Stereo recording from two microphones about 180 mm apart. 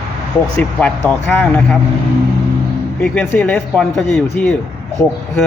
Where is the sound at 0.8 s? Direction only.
10° left (ahead or behind).